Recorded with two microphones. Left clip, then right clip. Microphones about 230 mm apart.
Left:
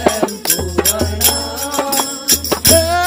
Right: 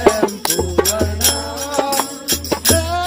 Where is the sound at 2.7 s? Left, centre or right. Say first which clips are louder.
Left 7 dB; left.